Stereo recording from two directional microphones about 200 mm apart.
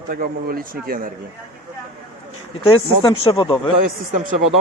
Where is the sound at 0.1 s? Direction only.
45° right (ahead or behind).